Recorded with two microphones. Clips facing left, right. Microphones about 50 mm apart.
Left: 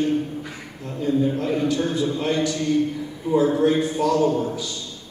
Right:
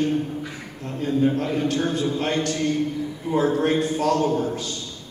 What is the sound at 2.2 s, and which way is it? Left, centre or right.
A man's voice, right.